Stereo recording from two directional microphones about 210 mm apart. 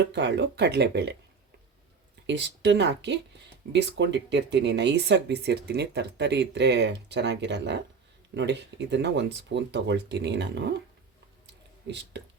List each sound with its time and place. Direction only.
0.1 s speech: 55° right (ahead or behind)
2.2 s speech: 55° right (ahead or behind)
11.9 s speech: 55° right (ahead or behind)